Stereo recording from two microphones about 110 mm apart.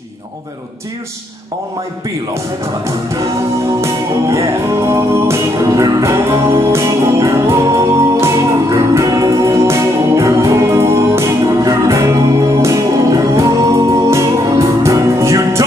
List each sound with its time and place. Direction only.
3.8 s music: 25° right (ahead or behind)